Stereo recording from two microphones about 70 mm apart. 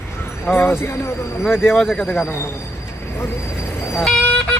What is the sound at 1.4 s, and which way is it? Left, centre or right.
Speech, centre.